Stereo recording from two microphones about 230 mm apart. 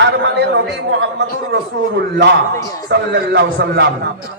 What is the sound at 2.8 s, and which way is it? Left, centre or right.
A man's voice, right.